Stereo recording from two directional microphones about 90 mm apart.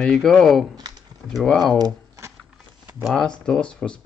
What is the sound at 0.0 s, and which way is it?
Speech, 5° left (ahead or behind).